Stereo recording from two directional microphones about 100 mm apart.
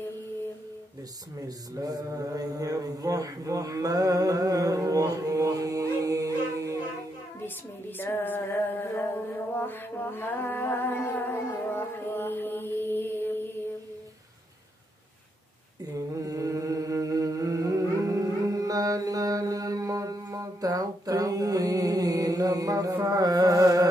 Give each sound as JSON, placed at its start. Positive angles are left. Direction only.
{"t": 1.4, "sound": "mantra", "side_deg": -35}
{"t": 8.0, "sound": "music", "side_deg": 20}
{"t": 15.8, "sound": "a sound", "side_deg": -35}
{"t": 23.0, "sound": "music", "side_deg": -35}